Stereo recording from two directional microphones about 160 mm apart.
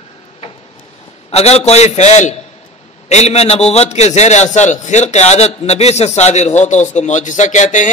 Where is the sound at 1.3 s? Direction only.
40° left (ahead or behind).